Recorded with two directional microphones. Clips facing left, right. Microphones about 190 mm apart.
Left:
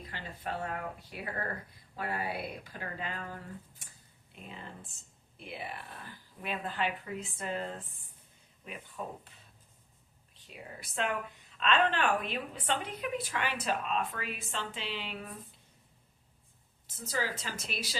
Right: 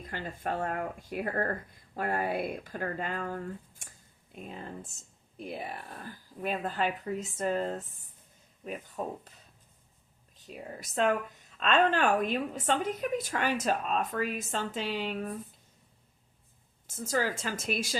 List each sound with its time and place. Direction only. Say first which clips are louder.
0.0 s a woman's voice: right 5 dB; 50° right (ahead or behind)
9.0 s speech: right 4 dB; 40° right (ahead or behind)
10.3 s a woman's voice: right 5 dB; 45° right (ahead or behind)
16.8 s a woman's voice: right 5 dB; 50° right (ahead or behind)